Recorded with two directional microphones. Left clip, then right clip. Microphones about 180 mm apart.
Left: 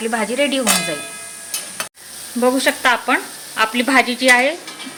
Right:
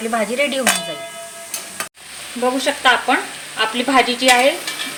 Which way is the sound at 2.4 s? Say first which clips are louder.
Left 2 dB; 15° left (ahead or behind).